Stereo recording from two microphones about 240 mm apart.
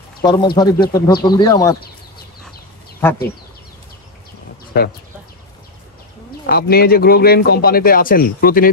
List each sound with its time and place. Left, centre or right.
0.2 s speech: centre
3.0 s speech: centre
4.7 s speech: left
6.4 s speech: left